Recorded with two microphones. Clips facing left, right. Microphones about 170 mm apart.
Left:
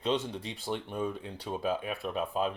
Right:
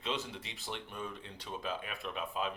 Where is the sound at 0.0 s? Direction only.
30° left (ahead or behind).